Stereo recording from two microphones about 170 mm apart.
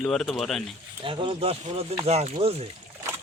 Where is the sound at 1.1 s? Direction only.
30° right (ahead or behind).